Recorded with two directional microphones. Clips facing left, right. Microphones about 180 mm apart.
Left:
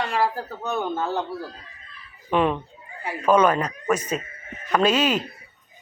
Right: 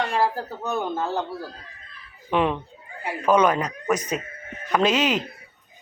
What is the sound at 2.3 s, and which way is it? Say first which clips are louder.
Speech: left 1 dB; 15° right (ahead or behind).